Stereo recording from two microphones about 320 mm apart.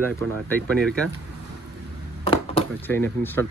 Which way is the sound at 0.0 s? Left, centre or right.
Centre.